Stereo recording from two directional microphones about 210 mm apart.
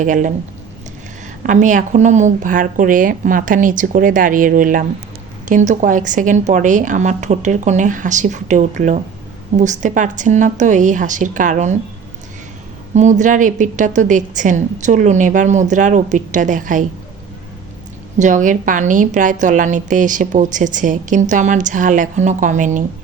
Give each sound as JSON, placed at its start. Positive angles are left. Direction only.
{"t": 0.0, "sound": "a woman's voice", "side_deg": -35}
{"t": 1.5, "sound": "a woman's voice", "side_deg": -35}
{"t": 12.9, "sound": "a woman's voice", "side_deg": -35}
{"t": 18.2, "sound": "a woman's voice", "side_deg": -35}